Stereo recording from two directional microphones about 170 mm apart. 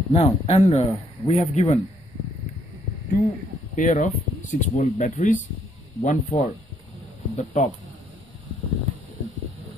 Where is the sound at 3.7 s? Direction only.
45° left (ahead or behind).